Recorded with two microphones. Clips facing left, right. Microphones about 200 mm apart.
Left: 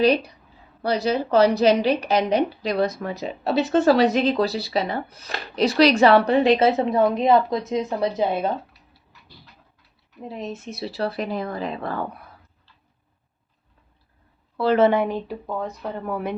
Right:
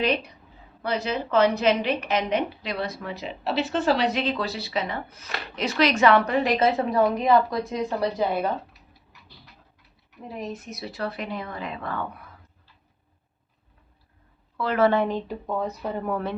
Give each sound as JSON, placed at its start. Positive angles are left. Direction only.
{"t": 0.0, "sound": "a woman's voice", "side_deg": 35}
{"t": 10.2, "sound": "a woman's voice", "side_deg": 25}
{"t": 14.5, "sound": "a woman's voice", "side_deg": 30}
{"t": 14.8, "sound": "a woman's voice", "side_deg": 10}